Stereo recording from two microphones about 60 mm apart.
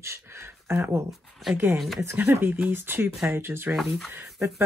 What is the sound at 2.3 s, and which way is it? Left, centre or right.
Speech, right.